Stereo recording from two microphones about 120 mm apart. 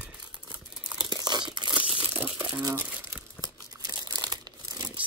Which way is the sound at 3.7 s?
35° right (ahead or behind).